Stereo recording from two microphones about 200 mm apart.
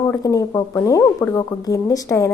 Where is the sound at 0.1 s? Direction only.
15° left (ahead or behind).